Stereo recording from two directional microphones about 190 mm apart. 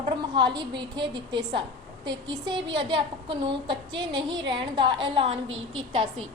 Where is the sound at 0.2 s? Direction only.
25° right (ahead or behind).